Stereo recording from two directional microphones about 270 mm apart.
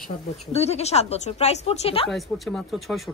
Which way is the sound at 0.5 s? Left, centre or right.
Left.